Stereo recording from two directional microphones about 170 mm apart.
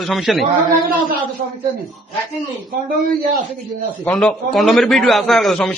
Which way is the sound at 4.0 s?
5° left (ahead or behind).